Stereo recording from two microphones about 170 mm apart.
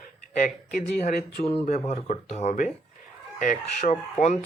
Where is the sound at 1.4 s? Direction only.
35° left (ahead or behind).